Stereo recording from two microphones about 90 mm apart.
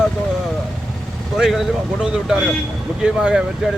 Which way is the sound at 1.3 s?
5° right (ahead or behind).